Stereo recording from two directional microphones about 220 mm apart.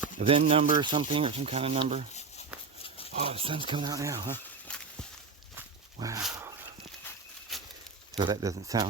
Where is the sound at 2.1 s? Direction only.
30° left (ahead or behind).